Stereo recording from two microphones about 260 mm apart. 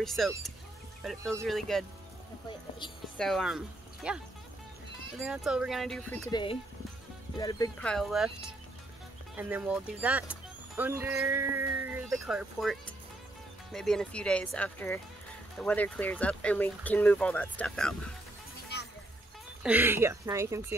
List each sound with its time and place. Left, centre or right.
0.0 s speech: centre
3.2 s speech: centre
5.2 s speech: centre
6.3 s speech: centre
7.9 s speech: centre
19.6 s speech: centre